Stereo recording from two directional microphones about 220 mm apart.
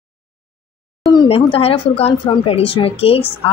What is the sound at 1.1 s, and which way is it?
Speech, 20° left (ahead or behind).